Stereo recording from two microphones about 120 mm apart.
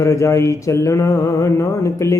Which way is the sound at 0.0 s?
25° left (ahead or behind).